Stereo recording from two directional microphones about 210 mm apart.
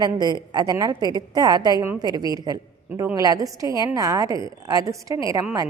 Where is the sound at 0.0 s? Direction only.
20° right (ahead or behind).